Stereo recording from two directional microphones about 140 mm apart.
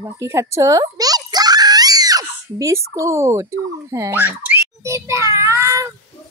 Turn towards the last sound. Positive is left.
turn(degrees=-20)  # may be behind; listen again after turning